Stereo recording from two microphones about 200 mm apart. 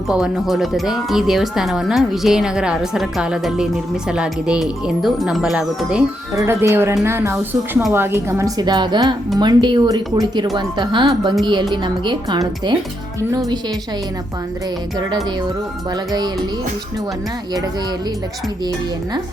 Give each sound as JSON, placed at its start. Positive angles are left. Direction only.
{"t": 0.1, "sound": "speech", "side_deg": 0}